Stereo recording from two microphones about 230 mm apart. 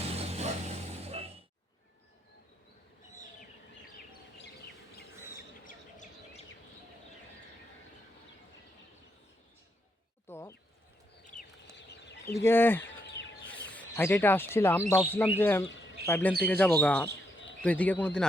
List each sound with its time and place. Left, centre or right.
0.0 s music: right
5.6 s chirp: left
10.2 s a sound: centre
11.3 s chicken: left
12.4 s speech: centre
13.2 s a sound: centre
13.7 s speech: centre